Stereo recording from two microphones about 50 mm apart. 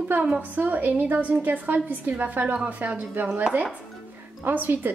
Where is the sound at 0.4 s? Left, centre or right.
Right.